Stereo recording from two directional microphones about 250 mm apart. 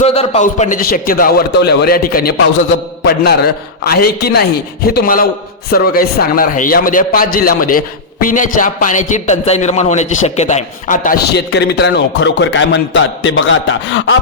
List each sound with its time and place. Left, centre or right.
0.0 s a man's voice: left